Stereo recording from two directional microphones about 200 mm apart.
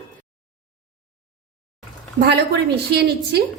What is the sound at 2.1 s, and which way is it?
A woman's voice, 50° right (ahead or behind).